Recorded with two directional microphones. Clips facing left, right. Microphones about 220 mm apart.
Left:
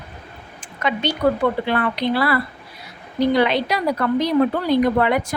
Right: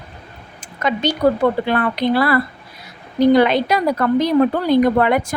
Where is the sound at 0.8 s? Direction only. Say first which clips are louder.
Right 3 dB; 40° right (ahead or behind).